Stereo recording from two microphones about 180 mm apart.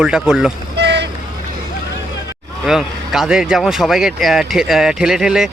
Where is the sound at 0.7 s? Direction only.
75° right (ahead or behind).